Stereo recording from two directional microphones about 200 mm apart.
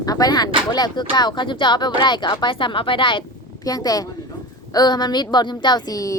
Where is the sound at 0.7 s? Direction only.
20° left (ahead or behind).